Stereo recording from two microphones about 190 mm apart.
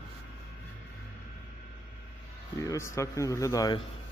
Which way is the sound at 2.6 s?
15° left (ahead or behind).